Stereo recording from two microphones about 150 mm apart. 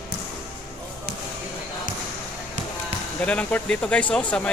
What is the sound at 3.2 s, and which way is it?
Speech, 10° left (ahead or behind).